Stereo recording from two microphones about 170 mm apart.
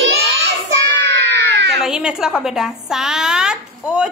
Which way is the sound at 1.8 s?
5° right (ahead or behind).